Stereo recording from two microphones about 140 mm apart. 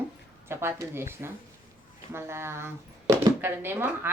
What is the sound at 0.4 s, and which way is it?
A woman's voice, 20° right (ahead or behind).